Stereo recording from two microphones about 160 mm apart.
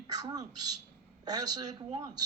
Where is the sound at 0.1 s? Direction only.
25° right (ahead or behind).